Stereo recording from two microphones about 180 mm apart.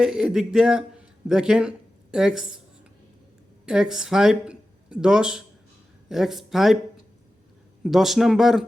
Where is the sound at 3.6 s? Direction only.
5° right (ahead or behind).